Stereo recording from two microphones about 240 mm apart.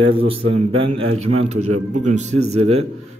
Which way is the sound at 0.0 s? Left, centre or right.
Right.